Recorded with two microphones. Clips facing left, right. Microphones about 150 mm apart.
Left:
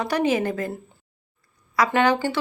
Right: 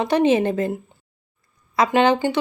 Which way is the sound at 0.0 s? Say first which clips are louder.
Right 5 dB; 25° right (ahead or behind).